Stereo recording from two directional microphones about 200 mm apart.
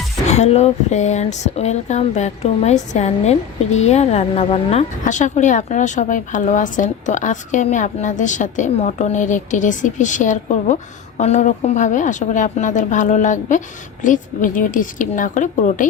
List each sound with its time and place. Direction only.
0.3 s speech: 35° left (ahead or behind)